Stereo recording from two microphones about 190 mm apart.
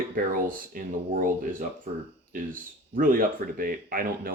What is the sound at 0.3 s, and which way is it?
Speech, 45° right (ahead or behind).